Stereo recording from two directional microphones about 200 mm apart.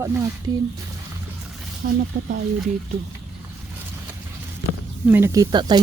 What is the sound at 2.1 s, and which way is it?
Speech, 45° right (ahead or behind).